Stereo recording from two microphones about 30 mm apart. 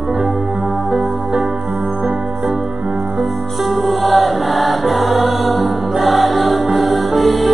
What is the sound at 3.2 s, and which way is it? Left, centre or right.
Music, centre.